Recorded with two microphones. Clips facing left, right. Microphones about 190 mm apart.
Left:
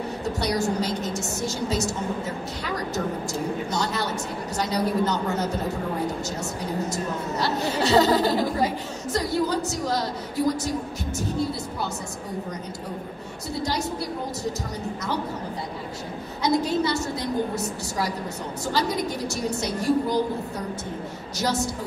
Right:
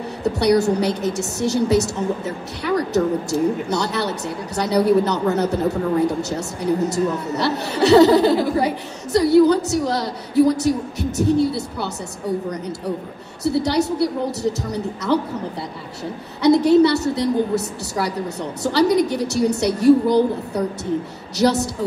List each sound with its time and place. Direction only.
0.2 s a woman's voice: 65° right (ahead or behind)
6.9 s a woman's voice: 70° right (ahead or behind)
13.4 s a woman's voice: 70° right (ahead or behind)
16.4 s a woman's voice: 70° right (ahead or behind)